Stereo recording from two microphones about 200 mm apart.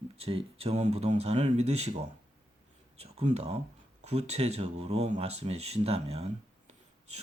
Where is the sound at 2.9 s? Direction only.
30° right (ahead or behind).